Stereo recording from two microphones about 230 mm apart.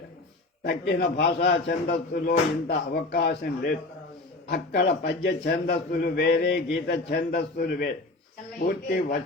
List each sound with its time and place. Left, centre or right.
0.6 s a man's voice: left